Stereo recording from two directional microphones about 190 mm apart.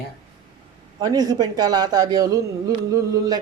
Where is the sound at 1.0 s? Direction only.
20° right (ahead or behind).